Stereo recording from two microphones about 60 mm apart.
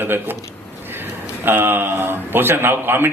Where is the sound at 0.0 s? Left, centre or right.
Right.